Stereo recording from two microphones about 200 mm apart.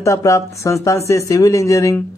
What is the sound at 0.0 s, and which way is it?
Speech, 15° left (ahead or behind).